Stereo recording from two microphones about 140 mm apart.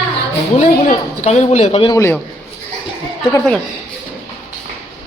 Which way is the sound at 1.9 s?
20° left (ahead or behind).